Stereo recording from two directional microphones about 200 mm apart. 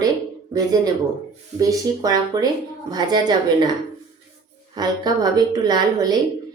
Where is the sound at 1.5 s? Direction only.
15° right (ahead or behind).